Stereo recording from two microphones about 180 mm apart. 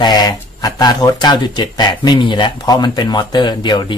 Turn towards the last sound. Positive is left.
turn(degrees=25)  # may be behind; listen again after turning